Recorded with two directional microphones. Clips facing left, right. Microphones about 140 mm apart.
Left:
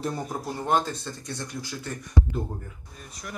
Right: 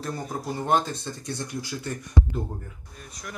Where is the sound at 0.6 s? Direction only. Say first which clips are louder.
Right 1 dB; centre (ahead or behind).